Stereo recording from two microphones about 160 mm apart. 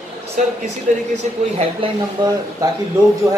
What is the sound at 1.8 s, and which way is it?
Speech, 35° right (ahead or behind).